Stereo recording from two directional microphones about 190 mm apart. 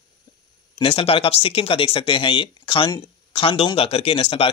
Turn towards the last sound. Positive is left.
turn(degrees=30)  # may be behind; listen again after turning